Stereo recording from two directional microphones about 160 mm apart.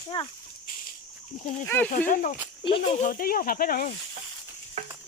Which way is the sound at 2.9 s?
55° left (ahead or behind).